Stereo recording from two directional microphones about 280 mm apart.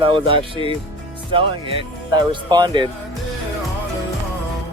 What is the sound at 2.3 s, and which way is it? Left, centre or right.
Speech, centre.